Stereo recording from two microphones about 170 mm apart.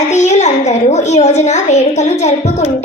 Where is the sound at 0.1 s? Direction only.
40° left (ahead or behind).